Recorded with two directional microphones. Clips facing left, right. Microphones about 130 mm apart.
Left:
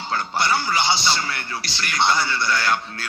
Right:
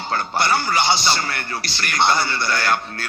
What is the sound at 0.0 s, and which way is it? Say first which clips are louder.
A man's voice: right 2 dB; 55° right (ahead or behind).